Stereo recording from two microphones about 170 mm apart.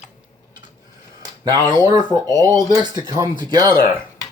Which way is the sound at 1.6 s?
25° right (ahead or behind).